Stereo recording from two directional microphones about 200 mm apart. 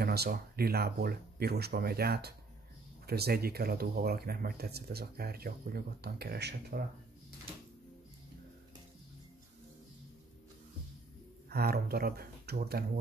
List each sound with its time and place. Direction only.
0.0 s speech: 50° right (ahead or behind)
11.4 s speech: 50° right (ahead or behind)